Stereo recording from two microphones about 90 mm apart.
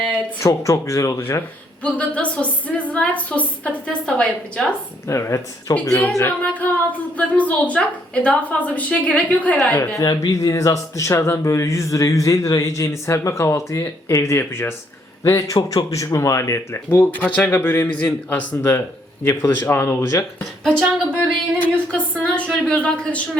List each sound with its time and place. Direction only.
0.3 s speech: 35° left (ahead or behind)
1.8 s a woman's voice: 15° left (ahead or behind)
5.0 s speech: 30° left (ahead or behind)
6.4 s a woman's voice: 15° left (ahead or behind)
10.0 s speech: 45° left (ahead or behind)
16.9 s speech: 20° left (ahead or behind); by 20.2 s 35° left (ahead or behind)
20.7 s a woman's voice: 10° left (ahead or behind)